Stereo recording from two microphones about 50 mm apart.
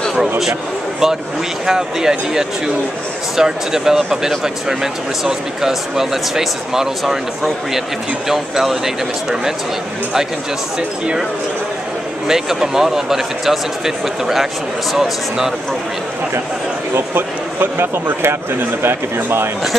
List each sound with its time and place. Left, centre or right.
1.7 s speech: centre
12.3 s speech: centre
16.9 s a man's voice: right